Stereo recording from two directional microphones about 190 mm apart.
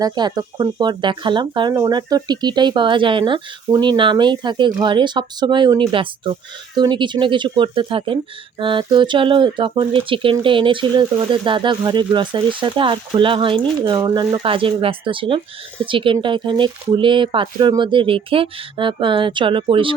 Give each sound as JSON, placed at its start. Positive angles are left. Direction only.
{"t": 0.0, "sound": "speech", "side_deg": -20}